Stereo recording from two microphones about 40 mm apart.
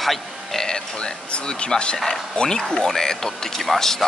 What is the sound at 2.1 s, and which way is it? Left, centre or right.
Speech, centre.